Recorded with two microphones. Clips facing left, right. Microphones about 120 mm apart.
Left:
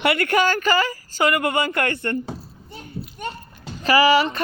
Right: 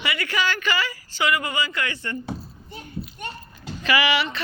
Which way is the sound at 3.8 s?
40° left (ahead or behind).